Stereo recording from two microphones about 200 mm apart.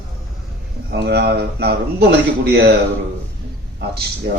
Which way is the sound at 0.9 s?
55° right (ahead or behind).